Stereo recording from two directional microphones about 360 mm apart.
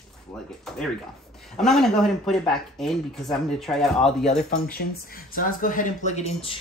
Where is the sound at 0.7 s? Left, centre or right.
Centre.